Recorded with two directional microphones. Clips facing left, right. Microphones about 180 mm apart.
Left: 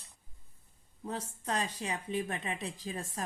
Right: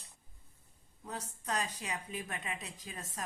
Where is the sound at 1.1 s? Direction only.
30° left (ahead or behind).